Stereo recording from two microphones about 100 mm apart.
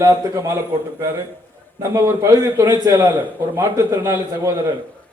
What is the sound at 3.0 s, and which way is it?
A man's voice, 20° right (ahead or behind).